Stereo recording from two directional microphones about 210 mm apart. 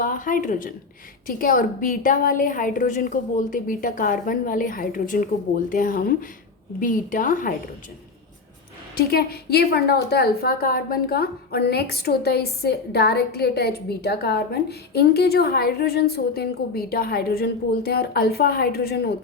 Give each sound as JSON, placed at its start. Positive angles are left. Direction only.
{"t": 0.0, "sound": "a woman's voice", "side_deg": 40}
{"t": 9.0, "sound": "a woman's voice", "side_deg": 45}